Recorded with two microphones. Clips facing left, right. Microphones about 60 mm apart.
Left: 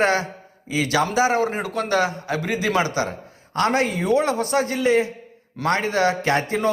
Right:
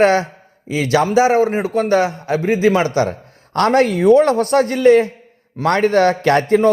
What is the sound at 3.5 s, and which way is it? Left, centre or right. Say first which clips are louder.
Speech: right 6 dB; right.